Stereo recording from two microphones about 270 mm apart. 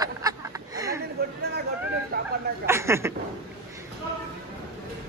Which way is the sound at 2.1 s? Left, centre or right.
Right.